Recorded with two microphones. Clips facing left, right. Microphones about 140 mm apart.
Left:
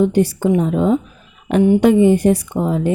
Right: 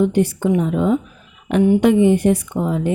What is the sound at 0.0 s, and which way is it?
A woman's voice, 35° left (ahead or behind).